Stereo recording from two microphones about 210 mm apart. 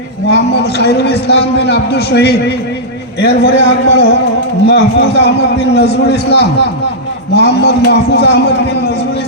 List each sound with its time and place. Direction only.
0.3 s a man's voice: 50° left (ahead or behind)